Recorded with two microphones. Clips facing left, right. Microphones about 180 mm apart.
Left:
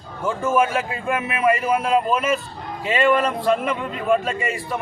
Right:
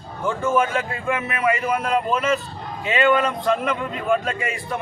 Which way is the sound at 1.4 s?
10° left (ahead or behind).